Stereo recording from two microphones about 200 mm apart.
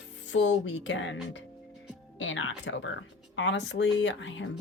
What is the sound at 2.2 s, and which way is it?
Music, 75° left (ahead or behind).